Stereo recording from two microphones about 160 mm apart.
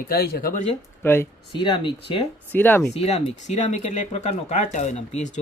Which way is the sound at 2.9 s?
40° left (ahead or behind).